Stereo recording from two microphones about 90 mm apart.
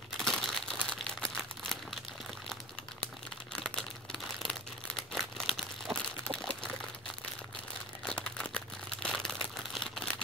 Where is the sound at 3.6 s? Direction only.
5° left (ahead or behind).